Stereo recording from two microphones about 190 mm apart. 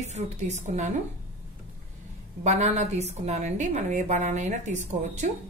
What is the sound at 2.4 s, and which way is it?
Speech, 35° right (ahead or behind).